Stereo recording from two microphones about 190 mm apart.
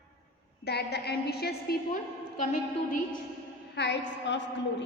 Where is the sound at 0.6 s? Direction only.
60° left (ahead or behind).